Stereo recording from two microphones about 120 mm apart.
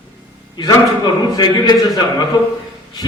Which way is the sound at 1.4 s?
35° left (ahead or behind).